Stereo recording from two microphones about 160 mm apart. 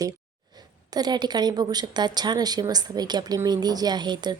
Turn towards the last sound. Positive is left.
turn(degrees=-25)  # may be behind; listen again after turning